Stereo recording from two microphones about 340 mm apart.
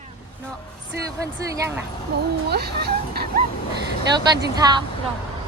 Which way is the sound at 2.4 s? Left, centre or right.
Right.